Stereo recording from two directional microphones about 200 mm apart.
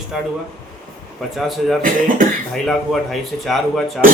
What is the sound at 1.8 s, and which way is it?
Speech, 45° right (ahead or behind).